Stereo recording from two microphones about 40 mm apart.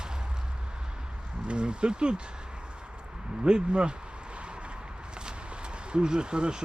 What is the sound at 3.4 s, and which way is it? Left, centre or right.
Speech, right.